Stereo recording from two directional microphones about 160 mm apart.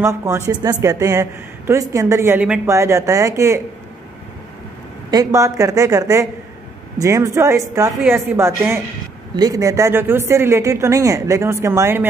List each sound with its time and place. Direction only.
0.0 s a woman's voice: 20° right (ahead or behind)
2.7 s a woman's voice: 20° right (ahead or behind)
5.1 s a woman's voice: 20° right (ahead or behind)